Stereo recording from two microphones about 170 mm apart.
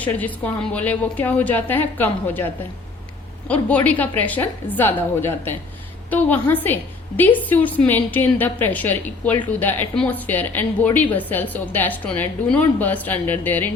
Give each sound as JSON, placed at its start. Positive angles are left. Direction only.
{"t": 0.0, "sound": "a woman's voice", "side_deg": 10}
{"t": 3.5, "sound": "a woman's voice", "side_deg": 10}